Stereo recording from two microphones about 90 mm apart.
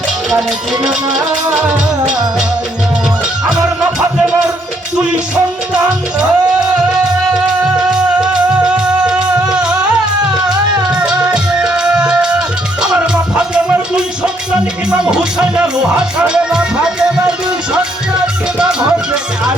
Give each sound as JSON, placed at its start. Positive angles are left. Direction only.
{"t": 4.9, "sound": "music", "side_deg": -10}
{"t": 10.9, "sound": "music", "side_deg": -10}
{"t": 18.6, "sound": "music", "side_deg": -10}